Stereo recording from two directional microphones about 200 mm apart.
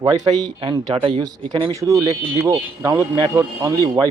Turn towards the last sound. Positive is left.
turn(degrees=-20)  # may be behind; listen again after turning